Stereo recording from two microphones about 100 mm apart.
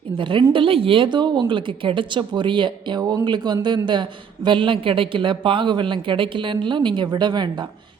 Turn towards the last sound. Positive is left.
turn(degrees=-45)  # may be behind; listen again after turning